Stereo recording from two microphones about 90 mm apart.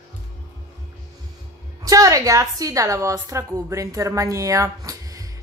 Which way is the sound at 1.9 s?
40° right (ahead or behind).